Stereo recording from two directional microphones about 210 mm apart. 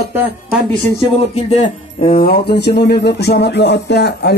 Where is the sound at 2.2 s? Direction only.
50° left (ahead or behind).